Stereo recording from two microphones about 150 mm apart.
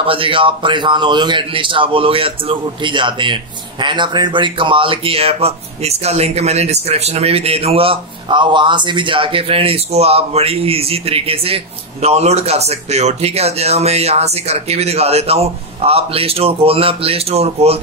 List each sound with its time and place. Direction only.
0.0 s speech: 35° right (ahead or behind)